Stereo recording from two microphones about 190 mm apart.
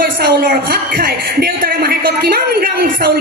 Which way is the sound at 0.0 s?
50° right (ahead or behind).